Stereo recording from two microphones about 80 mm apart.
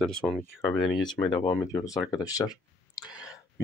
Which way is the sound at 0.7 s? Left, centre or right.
Left.